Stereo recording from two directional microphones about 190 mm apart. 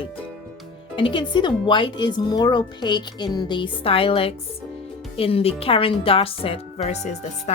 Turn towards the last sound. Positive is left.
turn(degrees=35)  # may be behind; listen again after turning